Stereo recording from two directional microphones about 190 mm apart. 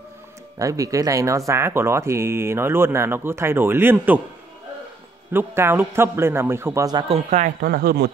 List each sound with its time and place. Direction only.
0.6 s speech: 15° right (ahead or behind)
5.3 s speech: 10° right (ahead or behind)
7.2 s speech: 40° right (ahead or behind)
7.6 s speech: 55° right (ahead or behind)